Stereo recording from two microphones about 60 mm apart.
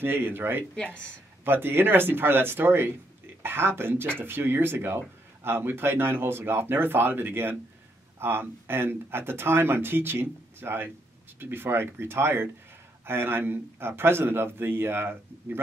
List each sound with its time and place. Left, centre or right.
0.0 s speech: right